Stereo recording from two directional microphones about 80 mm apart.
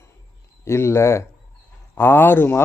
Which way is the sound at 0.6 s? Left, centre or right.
Left.